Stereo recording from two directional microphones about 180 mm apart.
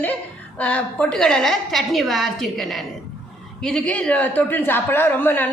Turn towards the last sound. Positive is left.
turn(degrees=10)  # may be behind; listen again after turning